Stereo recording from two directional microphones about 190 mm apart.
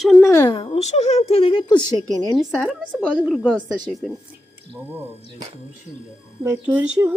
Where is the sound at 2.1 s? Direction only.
Centre (ahead or behind).